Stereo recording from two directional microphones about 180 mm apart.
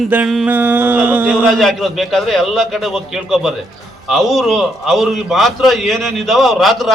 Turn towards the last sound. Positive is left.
turn(degrees=0)  # may be behind; listen again after turning